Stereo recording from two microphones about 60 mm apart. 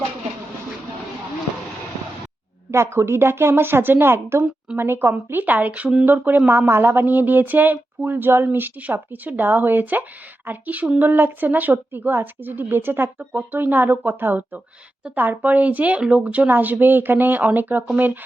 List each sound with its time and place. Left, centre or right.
2.6 s speech: right
5.3 s speech: right